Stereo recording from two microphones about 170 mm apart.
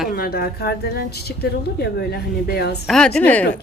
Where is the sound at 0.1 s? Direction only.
60° left (ahead or behind).